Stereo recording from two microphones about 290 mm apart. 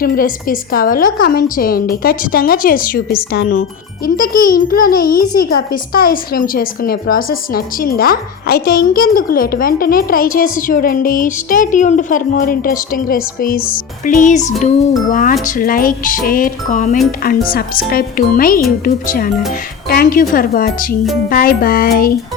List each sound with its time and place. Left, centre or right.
0.0 s speech: left